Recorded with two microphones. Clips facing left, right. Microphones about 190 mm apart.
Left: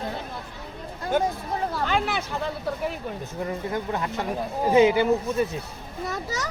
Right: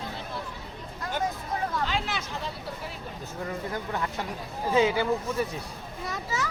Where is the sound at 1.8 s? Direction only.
55° left (ahead or behind).